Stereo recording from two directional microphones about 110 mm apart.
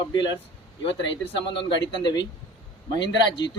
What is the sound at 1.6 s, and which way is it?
Speech, 40° left (ahead or behind).